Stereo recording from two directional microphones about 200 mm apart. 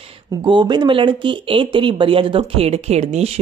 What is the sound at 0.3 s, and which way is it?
Speech, 20° right (ahead or behind).